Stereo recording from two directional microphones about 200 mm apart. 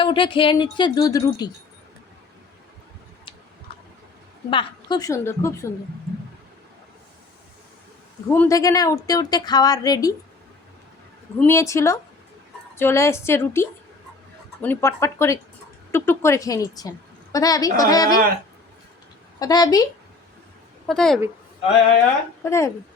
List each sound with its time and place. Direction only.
0.0 s a woman's voice: 25° left (ahead or behind)
4.4 s a woman's voice: 25° left (ahead or behind)
8.3 s a woman's voice: 15° left (ahead or behind)
11.3 s a woman's voice: 15° left (ahead or behind)
19.4 s a woman's voice: 20° left (ahead or behind)
20.8 s a woman's voice: centre (ahead or behind)
22.4 s a woman's voice: 15° left (ahead or behind)